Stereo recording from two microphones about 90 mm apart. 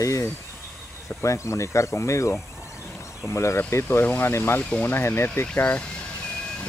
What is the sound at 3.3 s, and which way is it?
Speech, 30° left (ahead or behind).